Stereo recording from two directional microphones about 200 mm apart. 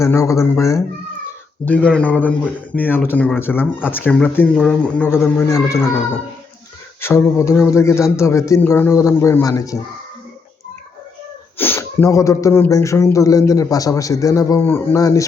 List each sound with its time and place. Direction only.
0.0 s speech: 15° left (ahead or behind)
7.0 s speech: 15° left (ahead or behind)
11.5 s speech: 10° left (ahead or behind)